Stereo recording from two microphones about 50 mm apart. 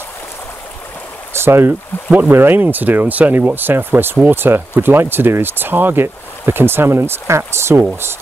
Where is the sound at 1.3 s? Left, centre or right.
Right.